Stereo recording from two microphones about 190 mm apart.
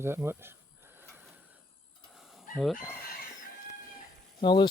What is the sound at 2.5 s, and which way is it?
Speech, centre (ahead or behind).